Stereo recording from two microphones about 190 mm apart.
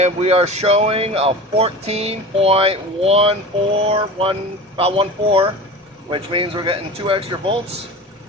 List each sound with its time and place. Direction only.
0.0 s speech: 35° right (ahead or behind)